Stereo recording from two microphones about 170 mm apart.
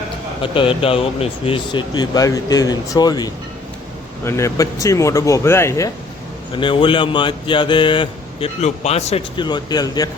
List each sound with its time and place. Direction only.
0.4 s speech: 30° left (ahead or behind)
6.5 s speech: 30° left (ahead or behind)
9.3 s speech: 25° left (ahead or behind)